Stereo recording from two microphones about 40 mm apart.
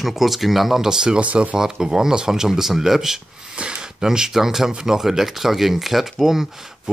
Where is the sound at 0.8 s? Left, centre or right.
Centre.